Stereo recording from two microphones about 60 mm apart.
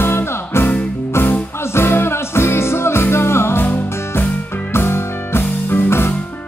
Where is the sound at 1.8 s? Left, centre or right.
Left.